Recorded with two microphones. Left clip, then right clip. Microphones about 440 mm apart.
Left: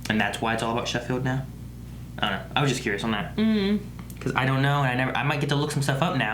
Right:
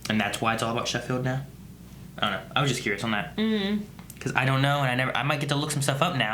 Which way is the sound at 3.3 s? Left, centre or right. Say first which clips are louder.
Left 2 dB; centre.